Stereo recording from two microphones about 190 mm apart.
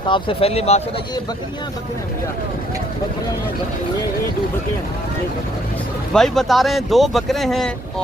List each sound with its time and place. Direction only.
0.1 s speech: 30° left (ahead or behind)
6.1 s speech: centre (ahead or behind)